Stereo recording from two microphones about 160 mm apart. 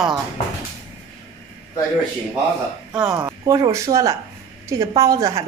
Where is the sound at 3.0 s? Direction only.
20° right (ahead or behind).